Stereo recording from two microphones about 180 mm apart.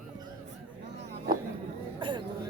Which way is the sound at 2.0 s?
25° right (ahead or behind).